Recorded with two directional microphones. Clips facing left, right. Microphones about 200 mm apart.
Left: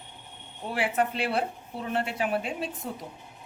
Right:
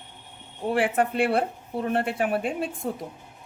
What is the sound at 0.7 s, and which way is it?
A woman's voice, 50° right (ahead or behind).